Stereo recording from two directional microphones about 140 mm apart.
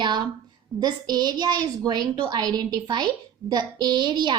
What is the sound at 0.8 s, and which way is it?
A woman's voice, 30° right (ahead or behind).